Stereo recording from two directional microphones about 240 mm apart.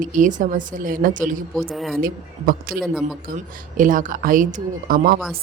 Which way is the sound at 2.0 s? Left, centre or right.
Right.